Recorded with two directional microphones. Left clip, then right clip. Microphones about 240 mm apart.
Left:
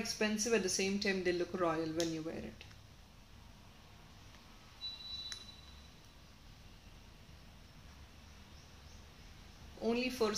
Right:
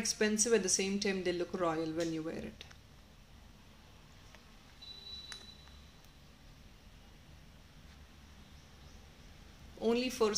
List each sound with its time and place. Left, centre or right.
0.0 s a woman's voice: right
9.8 s speech: right